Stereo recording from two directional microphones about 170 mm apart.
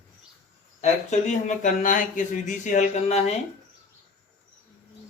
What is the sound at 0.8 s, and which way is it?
Speech, 45° left (ahead or behind).